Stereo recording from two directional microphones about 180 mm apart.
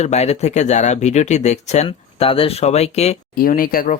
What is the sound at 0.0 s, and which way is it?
Speech, 40° left (ahead or behind).